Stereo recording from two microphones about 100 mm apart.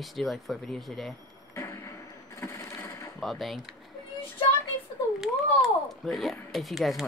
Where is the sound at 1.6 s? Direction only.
30° left (ahead or behind).